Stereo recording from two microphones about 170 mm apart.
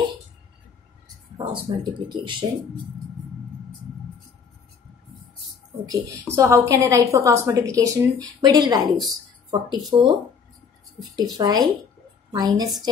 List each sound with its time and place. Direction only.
1.4 s speech: 30° right (ahead or behind)
5.9 s a woman's voice: 20° right (ahead or behind)
11.3 s speech: 25° right (ahead or behind)